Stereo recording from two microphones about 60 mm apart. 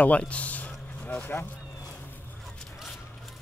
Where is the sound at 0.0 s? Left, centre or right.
Left.